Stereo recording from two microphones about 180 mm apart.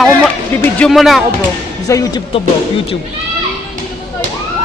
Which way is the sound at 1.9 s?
20° left (ahead or behind).